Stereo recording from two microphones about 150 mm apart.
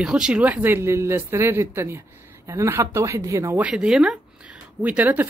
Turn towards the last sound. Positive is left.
turn(degrees=-10)  # may be behind; listen again after turning